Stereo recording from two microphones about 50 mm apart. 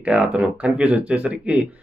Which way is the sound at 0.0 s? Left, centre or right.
Right.